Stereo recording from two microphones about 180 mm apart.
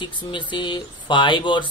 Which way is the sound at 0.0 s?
25° left (ahead or behind).